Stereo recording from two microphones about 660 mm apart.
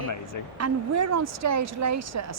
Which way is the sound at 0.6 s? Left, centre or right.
Right.